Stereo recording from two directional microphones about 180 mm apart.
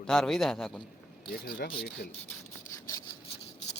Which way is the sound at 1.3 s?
55° left (ahead or behind).